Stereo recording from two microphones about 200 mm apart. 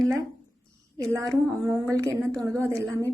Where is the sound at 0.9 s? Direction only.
15° right (ahead or behind).